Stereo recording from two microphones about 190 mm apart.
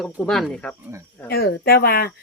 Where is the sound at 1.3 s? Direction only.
55° left (ahead or behind).